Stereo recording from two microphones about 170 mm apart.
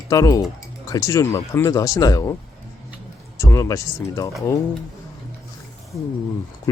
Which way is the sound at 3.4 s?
15° left (ahead or behind).